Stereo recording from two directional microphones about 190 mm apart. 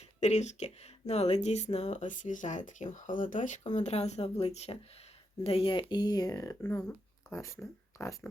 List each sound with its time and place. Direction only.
0.2 s speech: 35° left (ahead or behind); by 8.3 s 15° left (ahead or behind)